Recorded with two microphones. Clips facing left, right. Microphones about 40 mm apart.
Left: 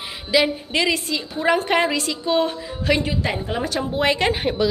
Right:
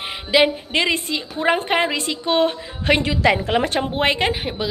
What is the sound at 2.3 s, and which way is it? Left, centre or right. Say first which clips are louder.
Speech: right 2 dB; right.